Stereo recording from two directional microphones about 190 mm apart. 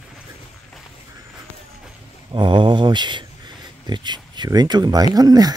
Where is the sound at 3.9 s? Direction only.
25° right (ahead or behind).